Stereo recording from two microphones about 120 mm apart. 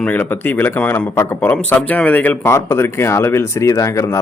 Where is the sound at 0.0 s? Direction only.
15° left (ahead or behind).